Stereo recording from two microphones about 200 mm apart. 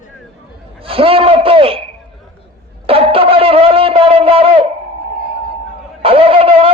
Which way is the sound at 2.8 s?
30° right (ahead or behind).